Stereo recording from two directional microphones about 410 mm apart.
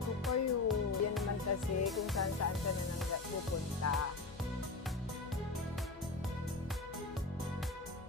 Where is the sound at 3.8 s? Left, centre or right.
Left.